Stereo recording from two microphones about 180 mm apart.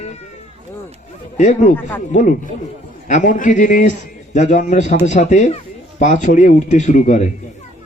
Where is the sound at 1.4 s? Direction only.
40° left (ahead or behind).